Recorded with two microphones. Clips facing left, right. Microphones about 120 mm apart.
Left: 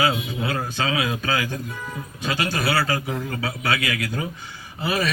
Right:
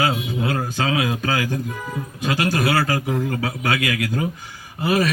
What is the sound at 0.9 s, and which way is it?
A man's voice, 40° right (ahead or behind).